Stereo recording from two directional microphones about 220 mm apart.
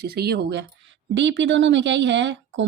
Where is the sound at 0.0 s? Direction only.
45° right (ahead or behind).